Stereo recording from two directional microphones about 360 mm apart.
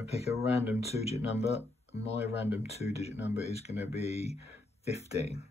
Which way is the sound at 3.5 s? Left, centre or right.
Centre.